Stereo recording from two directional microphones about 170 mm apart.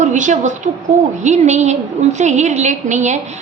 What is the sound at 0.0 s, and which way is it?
A woman's voice, 45° right (ahead or behind).